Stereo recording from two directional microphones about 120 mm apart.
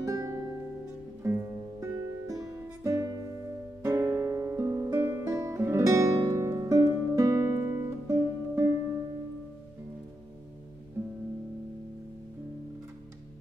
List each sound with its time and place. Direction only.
0.0 s music: 30° right (ahead or behind)